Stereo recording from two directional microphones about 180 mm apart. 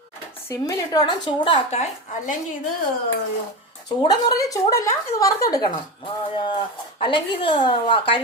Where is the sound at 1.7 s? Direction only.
40° left (ahead or behind).